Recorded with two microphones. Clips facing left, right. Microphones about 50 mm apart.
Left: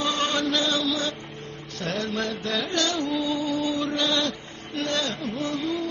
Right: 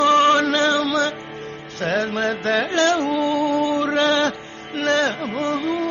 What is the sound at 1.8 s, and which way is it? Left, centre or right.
Music, right.